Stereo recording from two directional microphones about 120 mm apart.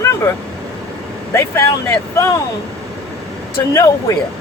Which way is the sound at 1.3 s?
25° left (ahead or behind).